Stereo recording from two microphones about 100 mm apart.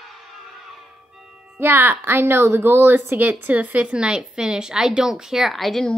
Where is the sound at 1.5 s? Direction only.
25° right (ahead or behind).